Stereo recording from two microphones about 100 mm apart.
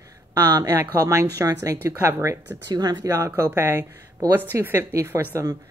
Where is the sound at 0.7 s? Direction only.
25° right (ahead or behind).